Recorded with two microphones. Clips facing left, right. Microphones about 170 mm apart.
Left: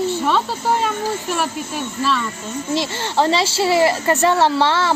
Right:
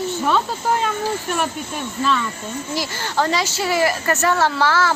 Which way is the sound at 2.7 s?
25° left (ahead or behind).